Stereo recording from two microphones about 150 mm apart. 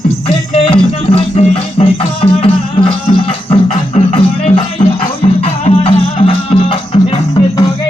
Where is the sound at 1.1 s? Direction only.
40° left (ahead or behind).